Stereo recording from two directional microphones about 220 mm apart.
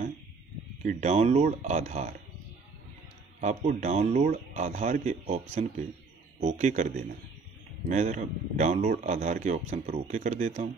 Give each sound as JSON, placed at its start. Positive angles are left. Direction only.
{"t": 0.8, "sound": "speech", "side_deg": -30}
{"t": 3.3, "sound": "speech", "side_deg": -35}